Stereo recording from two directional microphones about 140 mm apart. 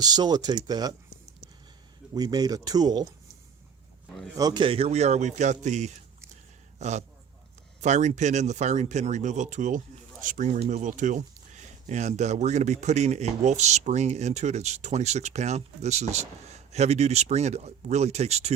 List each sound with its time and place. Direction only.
0.0 s speech: 30° right (ahead or behind)
2.1 s speech: 30° right (ahead or behind)
4.4 s speech: 30° right (ahead or behind); by 18.5 s 50° right (ahead or behind)